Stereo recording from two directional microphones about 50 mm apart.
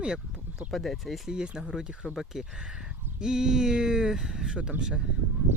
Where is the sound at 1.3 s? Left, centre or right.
Centre.